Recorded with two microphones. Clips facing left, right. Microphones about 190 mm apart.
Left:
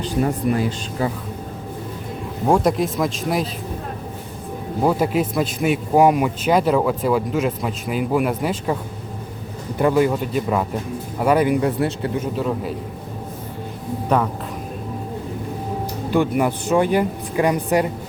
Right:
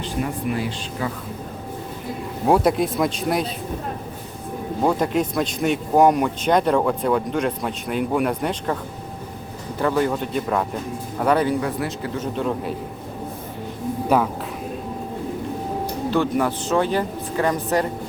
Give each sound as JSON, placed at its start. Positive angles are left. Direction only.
{"t": 0.5, "sound": "speech", "side_deg": 35}
{"t": 2.5, "sound": "a man's voice", "side_deg": 0}
{"t": 4.8, "sound": "a man's voice", "side_deg": 5}
{"t": 11.6, "sound": "speech", "side_deg": 30}
{"t": 12.1, "sound": "a man's voice", "side_deg": 5}
{"t": 16.0, "sound": "speech", "side_deg": 15}